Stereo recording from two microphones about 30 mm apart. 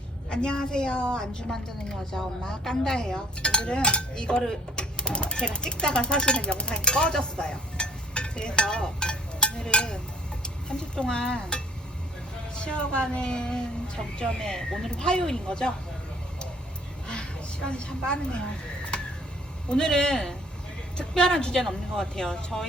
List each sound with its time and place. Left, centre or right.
0.3 s a woman's voice: left
3.4 s a woman's voice: left
9.7 s a sound: left
10.4 s a woman's voice: left
17.7 s a woman's voice: left
19.7 s a woman's voice: left
22.1 s a woman's voice: left